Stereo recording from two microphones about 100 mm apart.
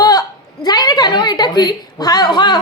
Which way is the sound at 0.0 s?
40° left (ahead or behind).